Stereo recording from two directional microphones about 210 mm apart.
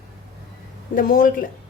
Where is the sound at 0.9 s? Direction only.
40° left (ahead or behind).